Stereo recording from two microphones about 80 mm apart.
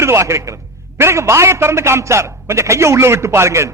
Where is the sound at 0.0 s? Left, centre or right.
Right.